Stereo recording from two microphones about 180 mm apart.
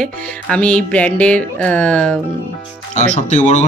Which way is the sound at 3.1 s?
40° left (ahead or behind).